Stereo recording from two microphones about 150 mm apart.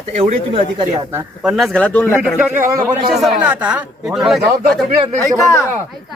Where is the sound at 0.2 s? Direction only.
40° right (ahead or behind).